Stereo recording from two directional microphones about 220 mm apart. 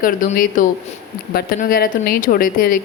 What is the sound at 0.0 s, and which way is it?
A woman's voice, 35° left (ahead or behind).